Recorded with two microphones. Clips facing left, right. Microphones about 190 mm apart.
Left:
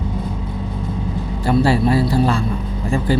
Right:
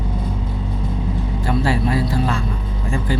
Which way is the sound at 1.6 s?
30° left (ahead or behind).